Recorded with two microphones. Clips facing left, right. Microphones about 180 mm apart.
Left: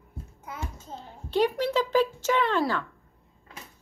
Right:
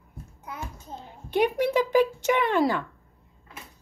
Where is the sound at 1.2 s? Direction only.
15° right (ahead or behind).